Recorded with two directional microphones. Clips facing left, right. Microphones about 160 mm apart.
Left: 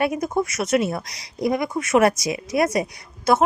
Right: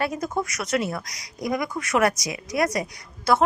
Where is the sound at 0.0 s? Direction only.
20° left (ahead or behind).